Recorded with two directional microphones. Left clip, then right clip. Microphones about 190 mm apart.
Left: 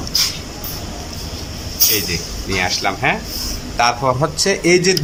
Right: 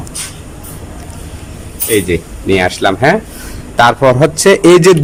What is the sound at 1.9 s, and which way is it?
A man's voice, 55° right (ahead or behind).